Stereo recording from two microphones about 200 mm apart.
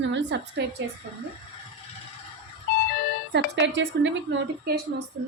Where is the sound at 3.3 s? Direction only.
60° right (ahead or behind).